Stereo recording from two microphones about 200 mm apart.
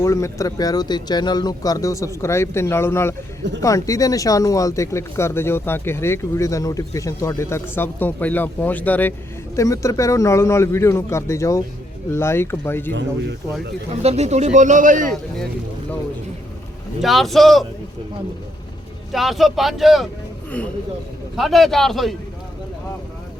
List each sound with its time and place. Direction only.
0.0 s speech: 15° left (ahead or behind)
12.9 s speech: 60° right (ahead or behind)
13.9 s speech: 30° right (ahead or behind)
17.0 s speech: centre (ahead or behind)
19.1 s speech: centre (ahead or behind)
21.3 s speech: centre (ahead or behind)